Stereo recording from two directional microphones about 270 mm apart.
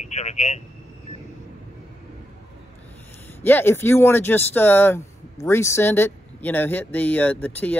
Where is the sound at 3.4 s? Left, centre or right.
Centre.